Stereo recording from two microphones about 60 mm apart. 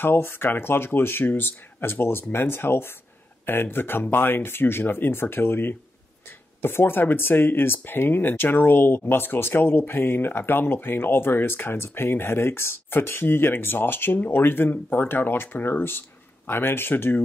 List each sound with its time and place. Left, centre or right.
0.0 s speech: left